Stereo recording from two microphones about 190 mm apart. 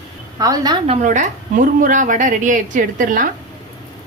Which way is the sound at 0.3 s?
20° right (ahead or behind).